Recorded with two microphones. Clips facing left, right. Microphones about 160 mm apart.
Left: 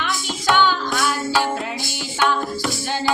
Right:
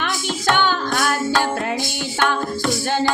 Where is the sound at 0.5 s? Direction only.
50° right (ahead or behind).